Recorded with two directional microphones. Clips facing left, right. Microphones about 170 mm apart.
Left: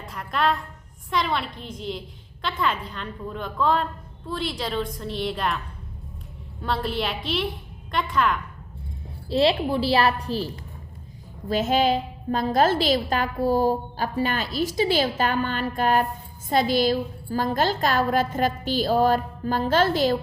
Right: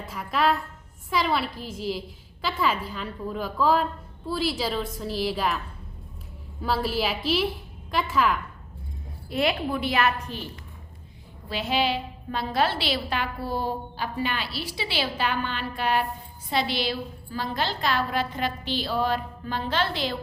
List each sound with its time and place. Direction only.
0.0 s a woman's voice: 5° right (ahead or behind)
6.6 s a woman's voice: 5° right (ahead or behind)
9.3 s a woman's voice: 30° left (ahead or behind)
11.4 s a woman's voice: 45° left (ahead or behind)